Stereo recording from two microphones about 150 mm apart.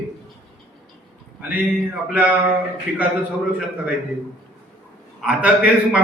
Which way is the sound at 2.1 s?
10° right (ahead or behind).